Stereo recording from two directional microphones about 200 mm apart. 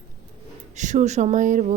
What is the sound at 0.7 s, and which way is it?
Speech, 35° right (ahead or behind).